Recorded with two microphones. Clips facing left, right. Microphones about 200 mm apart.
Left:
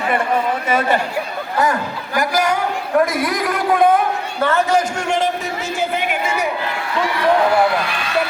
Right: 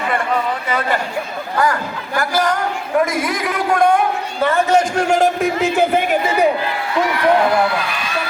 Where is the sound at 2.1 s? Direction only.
10° left (ahead or behind).